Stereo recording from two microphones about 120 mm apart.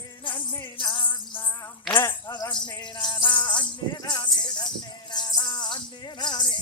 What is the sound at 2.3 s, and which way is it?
Music, 35° left (ahead or behind).